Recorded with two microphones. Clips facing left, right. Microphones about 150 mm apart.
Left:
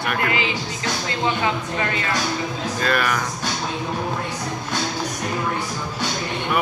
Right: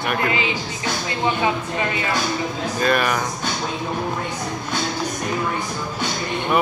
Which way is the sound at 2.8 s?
20° right (ahead or behind).